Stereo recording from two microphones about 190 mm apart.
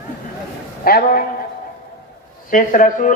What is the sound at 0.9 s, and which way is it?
Speech, 50° left (ahead or behind).